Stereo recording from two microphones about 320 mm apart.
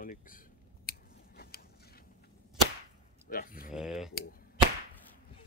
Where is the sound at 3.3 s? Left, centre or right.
Left.